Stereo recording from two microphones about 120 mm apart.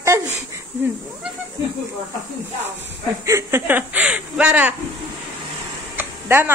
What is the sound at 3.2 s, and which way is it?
Speech, 25° right (ahead or behind).